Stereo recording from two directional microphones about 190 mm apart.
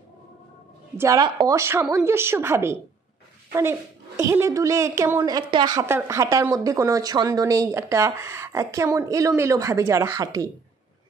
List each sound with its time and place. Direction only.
0.9 s a woman's voice: 20° right (ahead or behind)
4.2 s a woman's voice: 15° right (ahead or behind)